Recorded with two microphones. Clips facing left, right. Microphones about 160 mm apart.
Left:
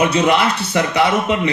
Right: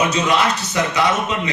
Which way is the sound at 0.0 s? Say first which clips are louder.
Left 3 dB; 60° left (ahead or behind).